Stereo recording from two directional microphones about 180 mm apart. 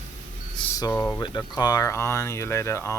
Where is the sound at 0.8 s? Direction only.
20° left (ahead or behind).